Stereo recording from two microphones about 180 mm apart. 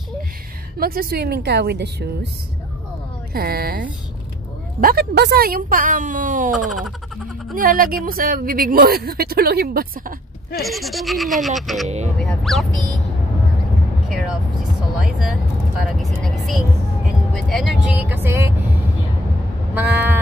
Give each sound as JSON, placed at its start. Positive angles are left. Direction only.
{"t": 0.7, "sound": "a woman's voice", "side_deg": -55}
{"t": 3.3, "sound": "a woman's voice", "side_deg": -55}
{"t": 6.5, "sound": "speech", "side_deg": 0}
{"t": 7.5, "sound": "a woman's voice", "side_deg": -50}
{"t": 10.5, "sound": "speech", "side_deg": 0}
{"t": 14.0, "sound": "vehicle", "side_deg": 0}
{"t": 15.0, "sound": "speech", "side_deg": 0}
{"t": 19.7, "sound": "a sound", "side_deg": -10}